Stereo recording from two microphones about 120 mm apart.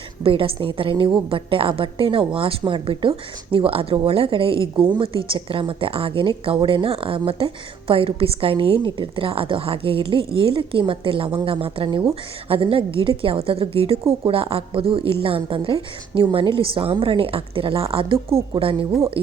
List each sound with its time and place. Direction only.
0.2 s speech: 50° right (ahead or behind)